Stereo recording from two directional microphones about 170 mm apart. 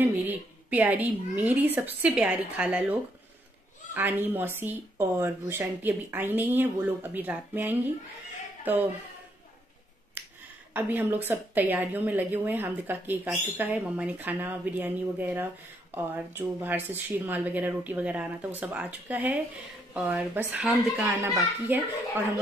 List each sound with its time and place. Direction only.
0.0 s a woman's voice: 10° right (ahead or behind)
10.7 s a woman's voice: 10° right (ahead or behind)